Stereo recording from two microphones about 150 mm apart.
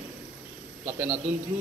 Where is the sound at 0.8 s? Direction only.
15° right (ahead or behind).